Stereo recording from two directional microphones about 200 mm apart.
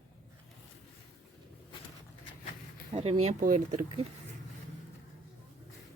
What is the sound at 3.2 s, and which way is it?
Speech, 40° right (ahead or behind).